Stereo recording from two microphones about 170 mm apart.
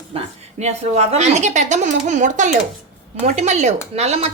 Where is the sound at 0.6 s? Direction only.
40° right (ahead or behind).